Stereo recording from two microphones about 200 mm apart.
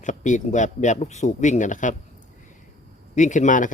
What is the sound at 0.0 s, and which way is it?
Speech, 40° left (ahead or behind).